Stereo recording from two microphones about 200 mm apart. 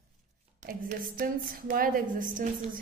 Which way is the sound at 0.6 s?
45° right (ahead or behind).